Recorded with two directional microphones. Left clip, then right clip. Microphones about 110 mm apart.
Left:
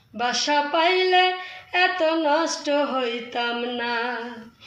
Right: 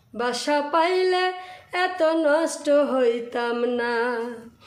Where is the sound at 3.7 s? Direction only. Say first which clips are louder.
Right 2 dB; 35° right (ahead or behind).